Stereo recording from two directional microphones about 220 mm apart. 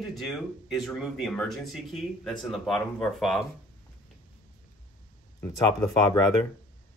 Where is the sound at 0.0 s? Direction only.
Centre (ahead or behind).